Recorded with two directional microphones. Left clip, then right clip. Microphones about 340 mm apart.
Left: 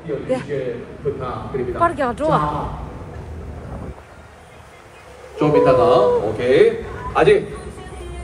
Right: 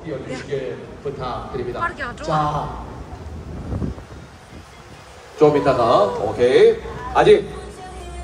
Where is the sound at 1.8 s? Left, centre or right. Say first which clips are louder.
Left 11 dB; centre.